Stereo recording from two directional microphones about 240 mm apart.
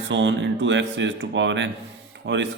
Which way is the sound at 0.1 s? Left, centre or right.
Right.